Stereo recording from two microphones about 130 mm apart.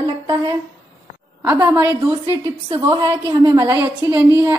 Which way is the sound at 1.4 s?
20° right (ahead or behind).